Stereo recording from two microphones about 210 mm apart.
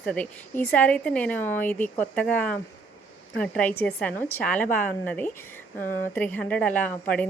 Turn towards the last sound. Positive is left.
turn(degrees=5)  # may be behind; listen again after turning